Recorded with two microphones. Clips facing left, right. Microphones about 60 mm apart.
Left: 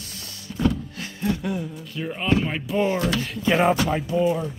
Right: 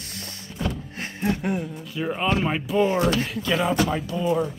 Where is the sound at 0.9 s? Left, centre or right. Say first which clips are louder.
Even; right.